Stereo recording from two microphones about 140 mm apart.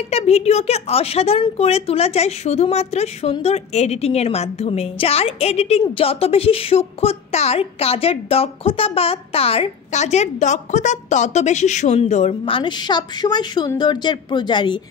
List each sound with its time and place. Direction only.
0.1 s a woman's voice: 50° left (ahead or behind)